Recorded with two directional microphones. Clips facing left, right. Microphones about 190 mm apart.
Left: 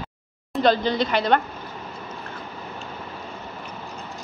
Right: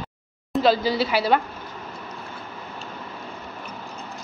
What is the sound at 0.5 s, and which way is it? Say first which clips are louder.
Speech: even; 5° right (ahead or behind).